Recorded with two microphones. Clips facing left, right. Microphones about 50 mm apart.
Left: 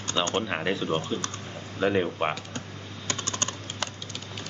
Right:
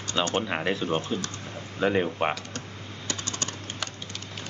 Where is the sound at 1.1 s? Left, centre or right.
Centre.